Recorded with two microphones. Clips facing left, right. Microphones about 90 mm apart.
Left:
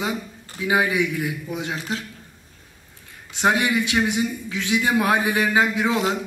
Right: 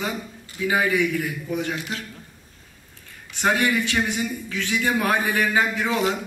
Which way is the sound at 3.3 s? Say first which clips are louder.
Left 1 dB; 20° left (ahead or behind).